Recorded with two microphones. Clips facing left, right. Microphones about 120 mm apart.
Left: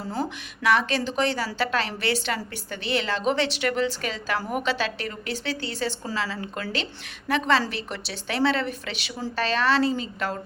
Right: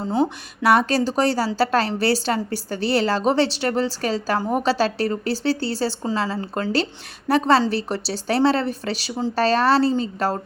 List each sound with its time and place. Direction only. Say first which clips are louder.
0.0 s speech: right 8 dB; 25° right (ahead or behind)
0.6 s a woman's voice: right 5 dB; 40° right (ahead or behind)